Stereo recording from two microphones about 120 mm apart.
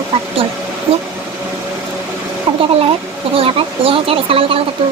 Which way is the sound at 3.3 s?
50° right (ahead or behind).